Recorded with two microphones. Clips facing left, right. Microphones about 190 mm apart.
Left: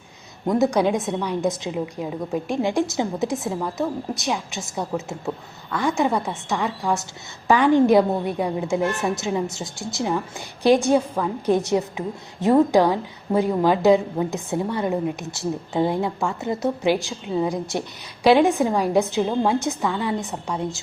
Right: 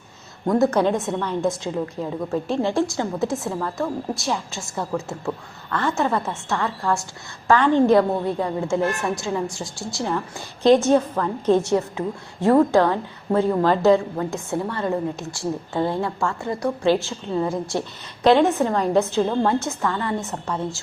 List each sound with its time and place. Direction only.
0.4 s a woman's voice: 15° left (ahead or behind)